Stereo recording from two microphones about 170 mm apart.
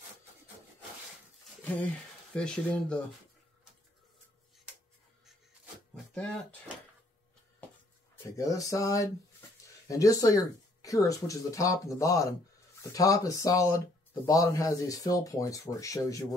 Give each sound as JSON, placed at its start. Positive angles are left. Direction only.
{"t": 2.3, "sound": "speech", "side_deg": 5}
{"t": 8.4, "sound": "speech", "side_deg": 20}